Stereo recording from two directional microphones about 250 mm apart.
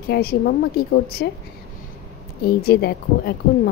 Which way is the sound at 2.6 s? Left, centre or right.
Left.